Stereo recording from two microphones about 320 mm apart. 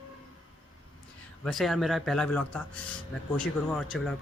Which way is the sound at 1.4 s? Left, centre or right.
Centre.